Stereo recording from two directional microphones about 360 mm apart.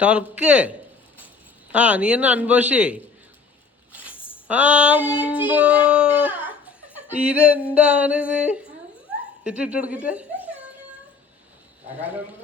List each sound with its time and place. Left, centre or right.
0.0 s female singing: centre
1.7 s female singing: centre
4.4 s female singing: centre
9.4 s speech: centre